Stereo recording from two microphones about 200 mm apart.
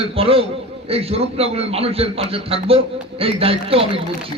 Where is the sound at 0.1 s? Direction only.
30° right (ahead or behind).